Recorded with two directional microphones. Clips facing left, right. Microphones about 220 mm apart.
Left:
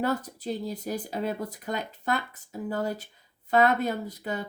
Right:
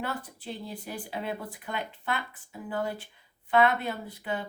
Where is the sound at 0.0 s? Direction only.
40° left (ahead or behind).